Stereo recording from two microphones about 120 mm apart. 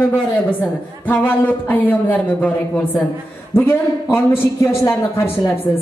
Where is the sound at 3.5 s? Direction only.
20° left (ahead or behind).